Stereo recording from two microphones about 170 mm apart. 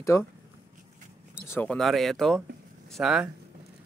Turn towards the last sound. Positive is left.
turn(degrees=0)  # may be behind; listen again after turning